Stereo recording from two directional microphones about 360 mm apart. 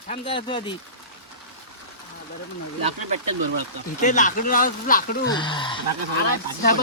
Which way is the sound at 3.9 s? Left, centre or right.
Left.